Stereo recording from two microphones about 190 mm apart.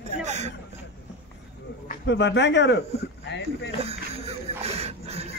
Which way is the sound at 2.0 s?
70° left (ahead or behind).